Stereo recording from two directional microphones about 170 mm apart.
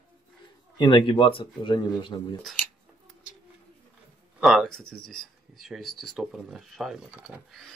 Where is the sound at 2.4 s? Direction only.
5° left (ahead or behind).